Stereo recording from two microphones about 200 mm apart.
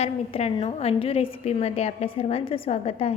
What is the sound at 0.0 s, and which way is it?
A woman's voice, 30° left (ahead or behind).